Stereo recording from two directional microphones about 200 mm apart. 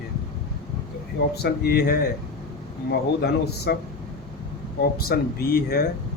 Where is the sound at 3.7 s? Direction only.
50° left (ahead or behind).